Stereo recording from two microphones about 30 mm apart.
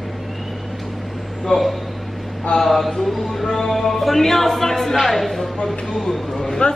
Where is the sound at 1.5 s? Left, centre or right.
Left.